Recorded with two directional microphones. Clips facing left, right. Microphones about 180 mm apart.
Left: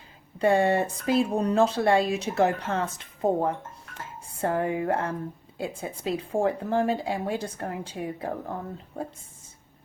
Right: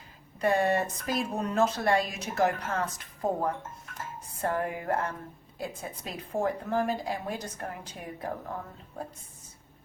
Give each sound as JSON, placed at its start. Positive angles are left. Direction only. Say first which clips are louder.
{"t": 0.3, "sound": "speech", "louder": "left 4 dB", "side_deg": 30}